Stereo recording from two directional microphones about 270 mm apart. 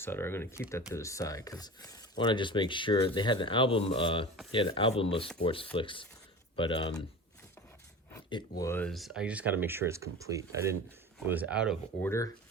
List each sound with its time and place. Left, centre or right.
0.0 s speech: centre
8.1 s speech: centre
12.0 s speech: centre